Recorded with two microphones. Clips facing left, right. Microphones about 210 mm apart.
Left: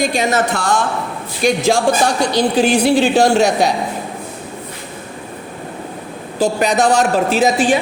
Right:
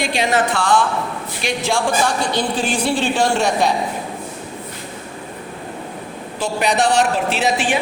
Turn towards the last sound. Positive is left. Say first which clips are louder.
# left 5 dB
turn(degrees=40)  # may be behind; listen again after turning